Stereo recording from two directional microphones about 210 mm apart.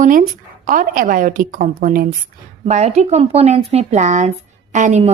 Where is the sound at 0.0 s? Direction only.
40° right (ahead or behind).